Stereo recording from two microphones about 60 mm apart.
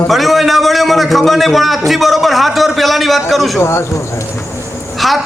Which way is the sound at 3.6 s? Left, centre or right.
Left.